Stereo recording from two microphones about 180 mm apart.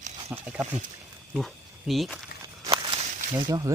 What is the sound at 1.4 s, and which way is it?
Speech, centre (ahead or behind).